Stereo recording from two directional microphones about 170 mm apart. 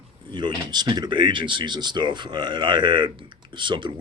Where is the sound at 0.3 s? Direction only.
25° right (ahead or behind).